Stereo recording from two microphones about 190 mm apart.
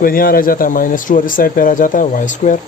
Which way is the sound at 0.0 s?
50° left (ahead or behind).